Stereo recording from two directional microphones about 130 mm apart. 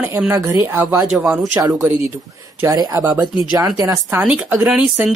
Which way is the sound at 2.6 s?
25° right (ahead or behind).